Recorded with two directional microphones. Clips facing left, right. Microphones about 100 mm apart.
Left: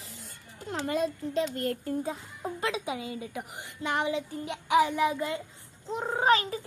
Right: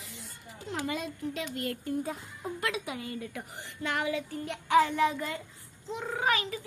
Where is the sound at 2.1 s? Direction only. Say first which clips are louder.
Left 2 dB; 25° left (ahead or behind).